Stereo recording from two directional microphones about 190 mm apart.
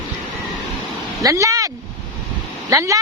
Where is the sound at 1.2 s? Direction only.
15° right (ahead or behind).